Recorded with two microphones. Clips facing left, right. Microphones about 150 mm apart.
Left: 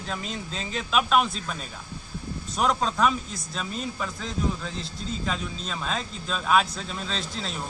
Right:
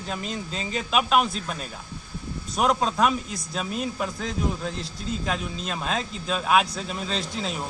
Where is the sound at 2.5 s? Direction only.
5° right (ahead or behind).